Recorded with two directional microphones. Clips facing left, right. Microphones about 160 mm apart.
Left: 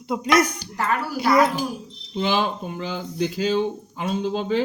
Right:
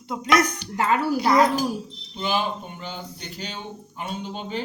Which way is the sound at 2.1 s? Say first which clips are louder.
Left 3 dB; 90° left.